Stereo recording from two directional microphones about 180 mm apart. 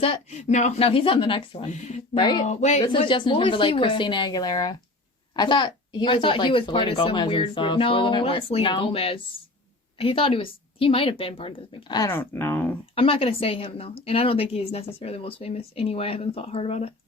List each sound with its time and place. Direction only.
0.0 s speech: 35° left (ahead or behind)
1.7 s a woman's voice: 40° left (ahead or behind)
2.1 s speech: 25° left (ahead or behind)
2.4 s a woman's voice: 40° left (ahead or behind)
2.8 s speech: 30° left (ahead or behind); by 12.7 s 10° left (ahead or behind)
13.0 s a woman's voice: 30° left (ahead or behind)